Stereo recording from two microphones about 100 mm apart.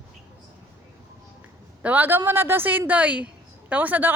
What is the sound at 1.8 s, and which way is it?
A woman's voice, 20° right (ahead or behind).